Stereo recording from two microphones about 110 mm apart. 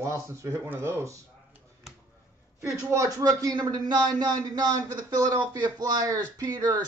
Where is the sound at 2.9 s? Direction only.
30° right (ahead or behind).